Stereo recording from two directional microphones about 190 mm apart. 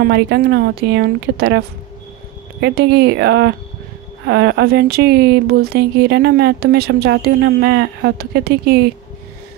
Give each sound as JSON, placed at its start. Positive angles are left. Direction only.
{"t": 0.0, "sound": "speech", "side_deg": -60}
{"t": 2.6, "sound": "speech", "side_deg": -65}